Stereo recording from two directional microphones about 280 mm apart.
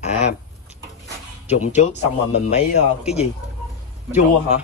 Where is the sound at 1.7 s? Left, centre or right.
Left.